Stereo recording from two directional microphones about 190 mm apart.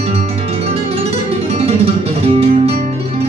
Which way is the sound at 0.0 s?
35° right (ahead or behind).